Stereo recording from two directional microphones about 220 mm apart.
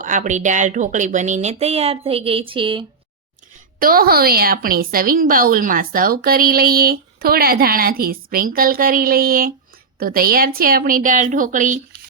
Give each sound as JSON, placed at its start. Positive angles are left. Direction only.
{"t": 0.0, "sound": "a woman's voice", "side_deg": -35}
{"t": 3.8, "sound": "a woman's voice", "side_deg": -40}